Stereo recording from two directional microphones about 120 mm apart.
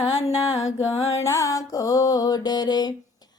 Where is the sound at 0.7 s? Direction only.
25° left (ahead or behind).